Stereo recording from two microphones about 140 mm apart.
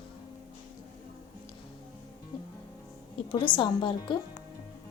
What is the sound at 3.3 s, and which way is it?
Speech, 35° left (ahead or behind).